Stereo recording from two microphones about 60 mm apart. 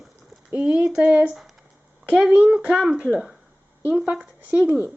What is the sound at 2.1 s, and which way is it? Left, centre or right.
Speech, centre.